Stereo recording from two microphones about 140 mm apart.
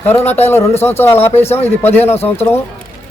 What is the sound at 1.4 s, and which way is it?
Speech, 50° left (ahead or behind).